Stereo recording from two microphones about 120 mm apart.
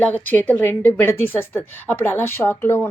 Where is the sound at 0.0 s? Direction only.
15° left (ahead or behind).